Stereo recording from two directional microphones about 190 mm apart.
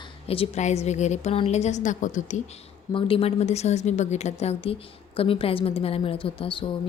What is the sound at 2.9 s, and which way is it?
A woman's voice, 30° left (ahead or behind).